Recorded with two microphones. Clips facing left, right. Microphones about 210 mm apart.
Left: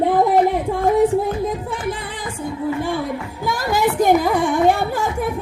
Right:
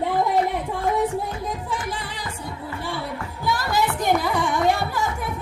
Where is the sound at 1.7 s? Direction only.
55° left (ahead or behind).